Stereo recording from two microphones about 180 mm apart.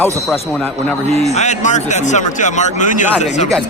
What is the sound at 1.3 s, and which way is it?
A man's voice, 40° left (ahead or behind).